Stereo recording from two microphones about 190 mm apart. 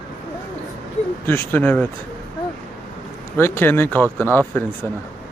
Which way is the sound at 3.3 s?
10° left (ahead or behind).